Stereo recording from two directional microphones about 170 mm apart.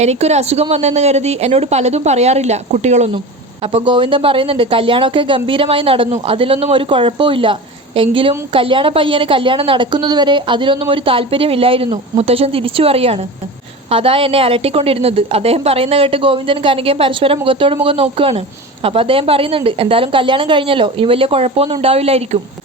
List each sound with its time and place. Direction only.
0.0 s a woman's voice: 40° right (ahead or behind)